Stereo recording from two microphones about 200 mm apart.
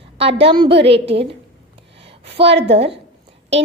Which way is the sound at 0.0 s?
30° right (ahead or behind).